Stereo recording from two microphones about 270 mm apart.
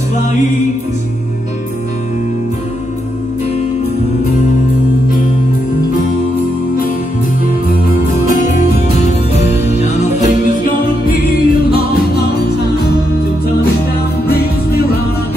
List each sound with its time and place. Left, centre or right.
8.3 s music: left
14.2 s music: left